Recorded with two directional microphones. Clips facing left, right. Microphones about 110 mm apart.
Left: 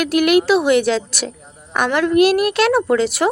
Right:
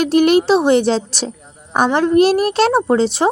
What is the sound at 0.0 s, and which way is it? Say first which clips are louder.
A woman's voice: right 2 dB; 30° right (ahead or behind).